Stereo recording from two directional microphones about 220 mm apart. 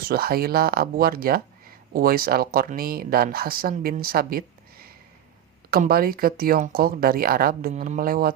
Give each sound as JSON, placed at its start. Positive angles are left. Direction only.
{"t": 0.0, "sound": "speech", "side_deg": -45}